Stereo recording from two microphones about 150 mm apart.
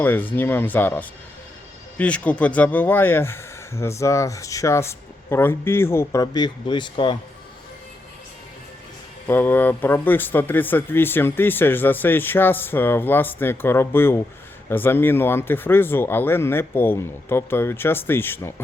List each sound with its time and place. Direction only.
0.0 s speech: 10° left (ahead or behind); by 7.2 s 30° left (ahead or behind)
9.2 s speech: 15° left (ahead or behind)